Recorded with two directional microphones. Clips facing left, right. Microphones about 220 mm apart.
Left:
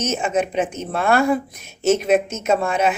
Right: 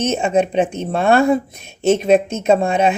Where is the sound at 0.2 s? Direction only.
25° right (ahead or behind).